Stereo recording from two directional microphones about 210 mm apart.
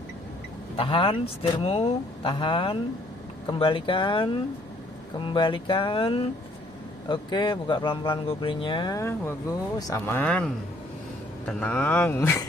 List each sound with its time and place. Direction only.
0.7 s speech: 25° left (ahead or behind)